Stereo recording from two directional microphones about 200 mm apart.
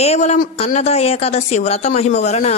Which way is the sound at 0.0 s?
35° left (ahead or behind).